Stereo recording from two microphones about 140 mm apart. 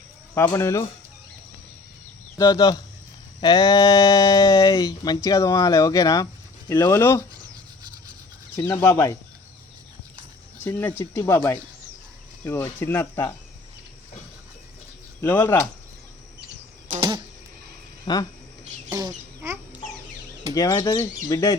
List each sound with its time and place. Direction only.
0.3 s speech: 20° left (ahead or behind)
2.4 s speech: 30° left (ahead or behind)
8.5 s speech: 20° left (ahead or behind)
10.6 s speech: 15° left (ahead or behind)
15.2 s speech: 20° left (ahead or behind)
18.0 s speech: 30° left (ahead or behind)
18.9 s speech: 25° right (ahead or behind)
20.5 s speech: 25° left (ahead or behind)